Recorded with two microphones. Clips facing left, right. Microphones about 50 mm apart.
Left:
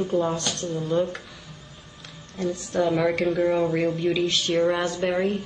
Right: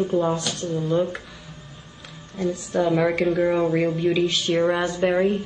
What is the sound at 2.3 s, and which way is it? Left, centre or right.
A woman's voice, centre.